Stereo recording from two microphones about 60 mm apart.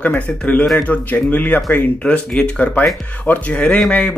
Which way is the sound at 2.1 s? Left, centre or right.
Centre.